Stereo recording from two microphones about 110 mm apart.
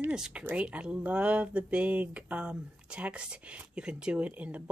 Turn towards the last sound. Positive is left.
turn(degrees=-15)  # may be behind; listen again after turning